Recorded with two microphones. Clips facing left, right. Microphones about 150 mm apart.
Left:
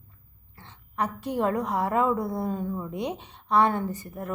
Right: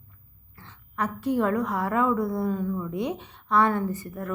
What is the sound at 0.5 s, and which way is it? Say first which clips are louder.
A woman's voice: left 1 dB; 25° left (ahead or behind).